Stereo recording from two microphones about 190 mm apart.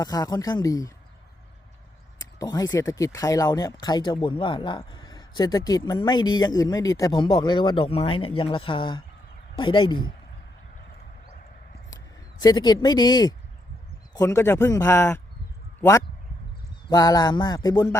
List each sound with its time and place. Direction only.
0.0 s speech: 20° left (ahead or behind)
2.4 s speech: 20° left (ahead or behind)
12.4 s speech: 20° left (ahead or behind)